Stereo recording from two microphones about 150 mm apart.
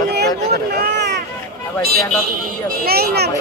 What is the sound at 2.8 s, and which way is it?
Speech, 90° right.